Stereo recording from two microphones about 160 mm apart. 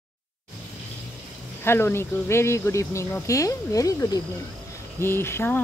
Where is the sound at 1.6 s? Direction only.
15° left (ahead or behind).